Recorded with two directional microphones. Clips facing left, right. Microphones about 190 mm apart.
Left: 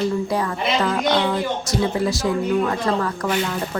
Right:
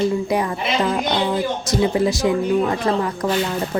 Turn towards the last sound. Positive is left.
turn(degrees=-15)  # may be behind; listen again after turning